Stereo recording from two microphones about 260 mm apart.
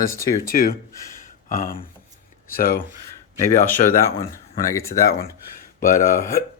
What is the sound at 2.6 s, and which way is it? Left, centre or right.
Throat clearing, left.